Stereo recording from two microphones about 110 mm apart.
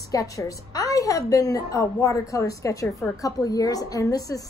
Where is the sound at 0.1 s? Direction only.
30° left (ahead or behind).